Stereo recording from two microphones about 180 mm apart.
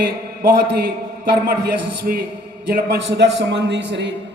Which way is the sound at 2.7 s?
65° right (ahead or behind).